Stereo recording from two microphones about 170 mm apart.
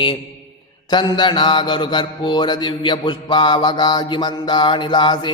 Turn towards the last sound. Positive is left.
turn(degrees=25)  # may be behind; listen again after turning